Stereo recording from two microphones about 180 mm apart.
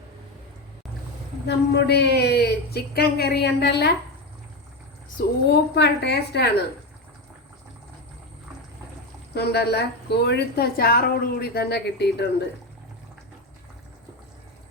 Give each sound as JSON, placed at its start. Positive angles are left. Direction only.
{"t": 1.5, "sound": "a woman's voice", "side_deg": 65}
{"t": 5.5, "sound": "a woman's voice", "side_deg": 70}
{"t": 9.3, "sound": "a woman's voice", "side_deg": 65}